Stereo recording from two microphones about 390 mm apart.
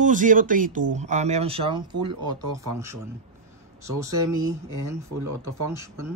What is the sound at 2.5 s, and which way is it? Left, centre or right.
Speech, centre.